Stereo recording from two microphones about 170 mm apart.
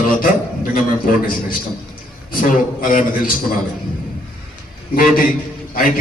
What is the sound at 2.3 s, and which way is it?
A man's voice, 55° left (ahead or behind).